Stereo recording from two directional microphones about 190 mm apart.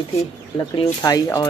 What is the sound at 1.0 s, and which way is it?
Speech, 20° left (ahead or behind).